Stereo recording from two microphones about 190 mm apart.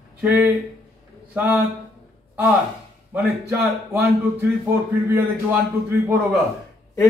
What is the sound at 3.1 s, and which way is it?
A man's voice, 10° right (ahead or behind).